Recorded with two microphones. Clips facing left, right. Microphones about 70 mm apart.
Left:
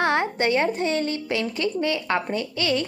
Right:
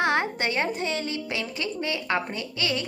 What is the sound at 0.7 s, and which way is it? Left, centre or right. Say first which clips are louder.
Speech: left 5 dB; left.